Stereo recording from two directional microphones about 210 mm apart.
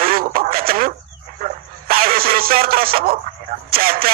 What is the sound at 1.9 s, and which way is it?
A man's voice, 45° right (ahead or behind).